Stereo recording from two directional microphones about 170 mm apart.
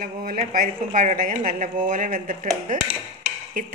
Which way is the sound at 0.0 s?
55° right (ahead or behind).